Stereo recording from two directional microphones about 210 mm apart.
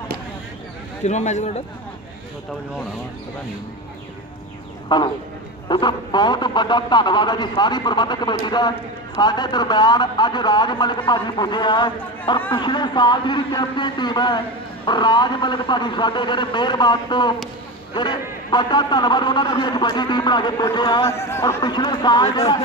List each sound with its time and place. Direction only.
1.0 s a man's voice: 35° left (ahead or behind)
4.8 s a man's voice: 20° left (ahead or behind)